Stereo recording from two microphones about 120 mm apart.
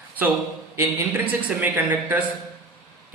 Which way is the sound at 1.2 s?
15° right (ahead or behind).